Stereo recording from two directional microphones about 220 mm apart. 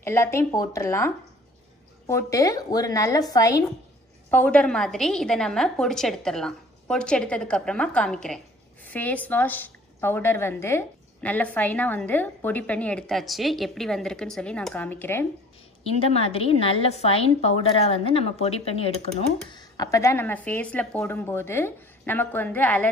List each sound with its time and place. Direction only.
0.0 s a woman's voice: 10° left (ahead or behind)
15.8 s a woman's voice: 25° left (ahead or behind); by 22.8 s 5° left (ahead or behind)